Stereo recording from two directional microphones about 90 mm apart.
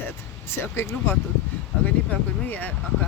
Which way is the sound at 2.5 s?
20° left (ahead or behind).